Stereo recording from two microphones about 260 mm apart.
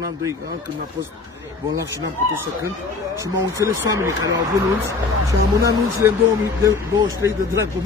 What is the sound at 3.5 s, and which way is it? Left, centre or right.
Speech, centre.